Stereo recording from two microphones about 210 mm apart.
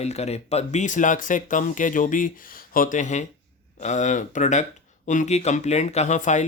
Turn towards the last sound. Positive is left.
turn(degrees=35)  # may be behind; listen again after turning